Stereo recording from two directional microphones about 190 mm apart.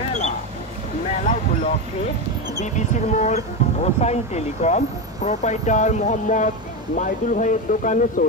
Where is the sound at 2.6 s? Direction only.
40° left (ahead or behind).